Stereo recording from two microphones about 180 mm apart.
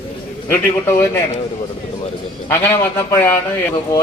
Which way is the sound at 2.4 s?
10° left (ahead or behind).